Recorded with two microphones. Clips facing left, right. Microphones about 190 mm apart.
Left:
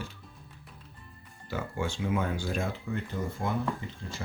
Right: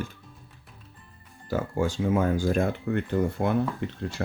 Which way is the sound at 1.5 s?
40° right (ahead or behind).